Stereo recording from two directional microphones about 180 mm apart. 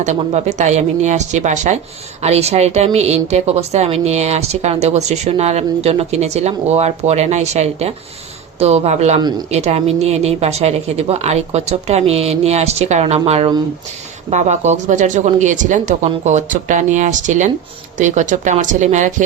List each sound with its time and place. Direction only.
0.0 s a woman's voice: 40° right (ahead or behind)